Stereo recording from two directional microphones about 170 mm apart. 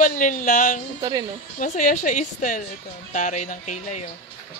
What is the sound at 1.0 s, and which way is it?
Speech, 25° right (ahead or behind).